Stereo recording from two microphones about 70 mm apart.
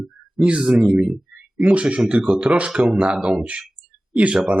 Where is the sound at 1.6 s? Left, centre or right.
Centre.